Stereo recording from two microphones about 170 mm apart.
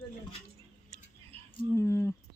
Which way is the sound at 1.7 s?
15° left (ahead or behind).